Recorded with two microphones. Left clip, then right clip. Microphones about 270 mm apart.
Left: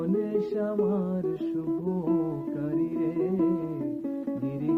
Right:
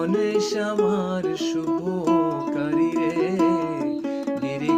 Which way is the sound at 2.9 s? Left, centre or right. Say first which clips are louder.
Right 6 dB; right.